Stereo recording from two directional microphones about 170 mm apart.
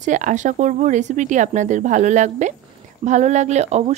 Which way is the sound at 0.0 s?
50° right (ahead or behind).